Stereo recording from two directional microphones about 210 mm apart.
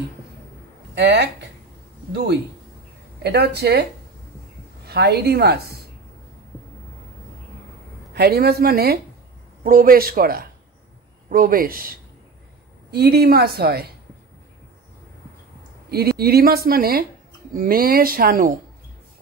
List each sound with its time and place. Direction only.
0.9 s speech: 55° right (ahead or behind)
3.3 s speech: 50° right (ahead or behind)
4.8 s speech: 50° right (ahead or behind)
8.1 s speech: 50° right (ahead or behind)
15.9 s speech: 50° right (ahead or behind)